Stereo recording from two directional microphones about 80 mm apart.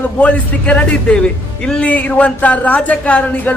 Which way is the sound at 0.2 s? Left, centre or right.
Centre.